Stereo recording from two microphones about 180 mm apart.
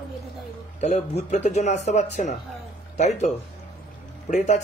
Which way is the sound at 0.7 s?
40° left (ahead or behind).